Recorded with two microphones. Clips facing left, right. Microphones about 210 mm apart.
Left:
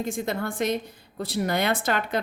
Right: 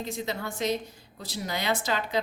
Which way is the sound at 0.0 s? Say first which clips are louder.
Left 5 dB; 50° left (ahead or behind).